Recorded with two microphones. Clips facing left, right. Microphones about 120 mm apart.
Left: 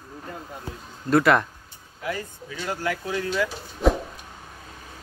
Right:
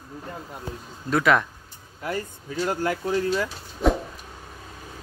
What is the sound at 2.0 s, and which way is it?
Speech, 40° right (ahead or behind).